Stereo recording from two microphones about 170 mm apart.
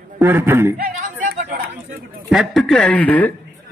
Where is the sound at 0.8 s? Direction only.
55° right (ahead or behind).